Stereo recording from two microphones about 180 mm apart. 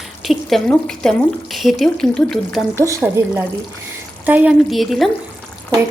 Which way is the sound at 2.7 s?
15° right (ahead or behind).